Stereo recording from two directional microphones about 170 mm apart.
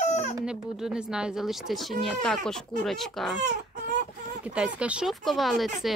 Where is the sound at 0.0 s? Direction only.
40° left (ahead or behind).